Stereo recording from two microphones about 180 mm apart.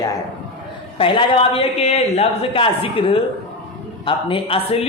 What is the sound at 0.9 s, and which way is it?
A woman's voice, 30° left (ahead or behind).